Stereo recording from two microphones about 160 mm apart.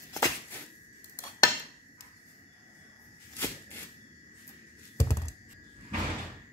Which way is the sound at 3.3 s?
15° left (ahead or behind).